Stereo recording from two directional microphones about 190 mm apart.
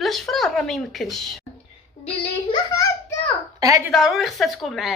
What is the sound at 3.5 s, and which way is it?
Speech, 15° right (ahead or behind).